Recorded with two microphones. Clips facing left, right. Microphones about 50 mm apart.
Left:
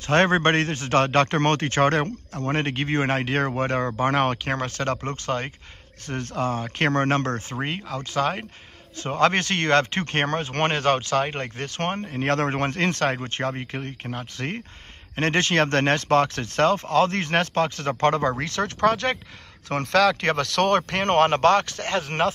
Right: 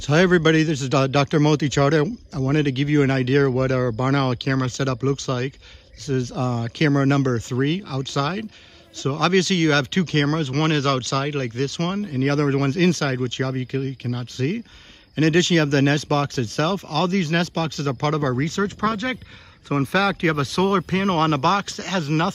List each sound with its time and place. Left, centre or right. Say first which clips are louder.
0.0 s a man's voice: right 2 dB; left
6.0 s a man's voice: right 3 dB; left
11.7 s a man's voice: right 2 dB; left
18.4 s speech: even; left
19.7 s speech: left 1 dB; left